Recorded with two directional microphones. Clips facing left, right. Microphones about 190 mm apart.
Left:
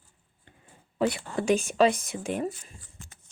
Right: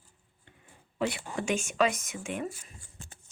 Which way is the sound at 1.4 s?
35° left (ahead or behind).